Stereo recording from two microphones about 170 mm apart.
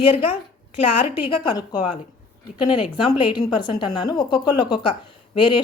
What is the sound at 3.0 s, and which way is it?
A woman's voice, 30° left (ahead or behind).